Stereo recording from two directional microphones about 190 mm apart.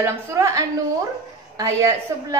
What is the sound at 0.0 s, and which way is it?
A woman's voice, 15° right (ahead or behind).